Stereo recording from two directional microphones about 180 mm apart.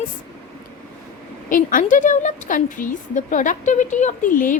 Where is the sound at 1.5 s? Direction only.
50° left (ahead or behind).